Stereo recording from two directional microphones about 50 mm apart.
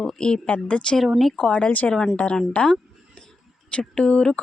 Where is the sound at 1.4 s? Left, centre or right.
Centre.